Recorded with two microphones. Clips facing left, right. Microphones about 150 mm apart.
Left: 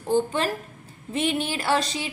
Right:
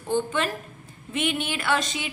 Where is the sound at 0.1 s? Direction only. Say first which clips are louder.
Left 2 dB; 35° left (ahead or behind).